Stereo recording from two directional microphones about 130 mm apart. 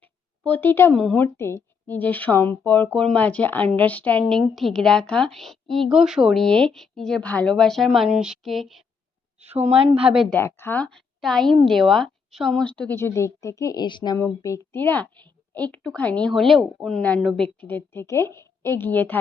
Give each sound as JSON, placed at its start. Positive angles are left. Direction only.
{"t": 0.0, "sound": "a sound", "side_deg": 10}
{"t": 1.0, "sound": "a woman's voice", "side_deg": 15}
{"t": 9.4, "sound": "a woman's voice", "side_deg": -55}
{"t": 10.2, "sound": "speech", "side_deg": 15}
{"t": 14.2, "sound": "speech", "side_deg": 20}